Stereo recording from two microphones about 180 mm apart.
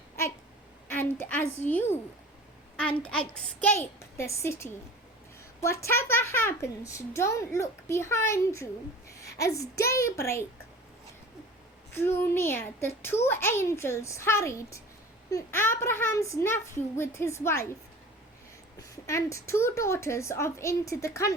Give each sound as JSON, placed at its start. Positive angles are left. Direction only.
{"t": 0.9, "sound": "a woman's voice", "side_deg": 10}
{"t": 11.9, "sound": "a child's voice", "side_deg": 10}
{"t": 18.8, "sound": "a child's voice", "side_deg": 15}